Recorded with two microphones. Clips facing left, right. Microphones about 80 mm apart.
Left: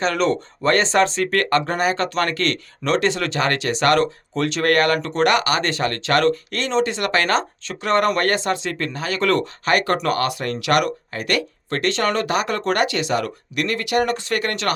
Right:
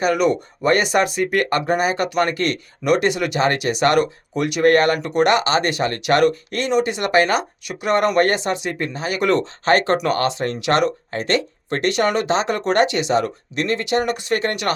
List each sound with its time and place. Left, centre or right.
0.0 s speech: centre